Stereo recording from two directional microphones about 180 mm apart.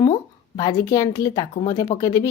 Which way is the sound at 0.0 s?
25° left (ahead or behind).